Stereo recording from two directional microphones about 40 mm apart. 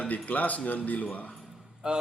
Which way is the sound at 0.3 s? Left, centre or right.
Left.